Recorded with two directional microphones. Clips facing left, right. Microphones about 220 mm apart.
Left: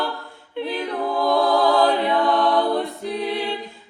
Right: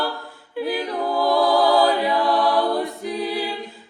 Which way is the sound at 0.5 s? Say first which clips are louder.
Right 1 dB; 5° right (ahead or behind).